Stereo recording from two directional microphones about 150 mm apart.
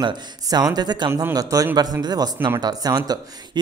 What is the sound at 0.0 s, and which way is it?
Speech, 25° right (ahead or behind).